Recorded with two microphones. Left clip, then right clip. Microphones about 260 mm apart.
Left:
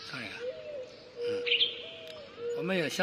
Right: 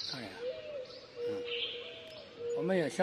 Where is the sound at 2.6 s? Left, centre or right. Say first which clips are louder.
Even; centre.